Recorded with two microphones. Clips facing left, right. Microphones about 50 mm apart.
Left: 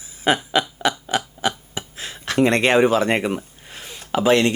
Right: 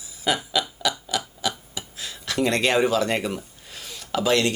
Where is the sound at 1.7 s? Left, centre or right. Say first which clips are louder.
Left 4 dB; left.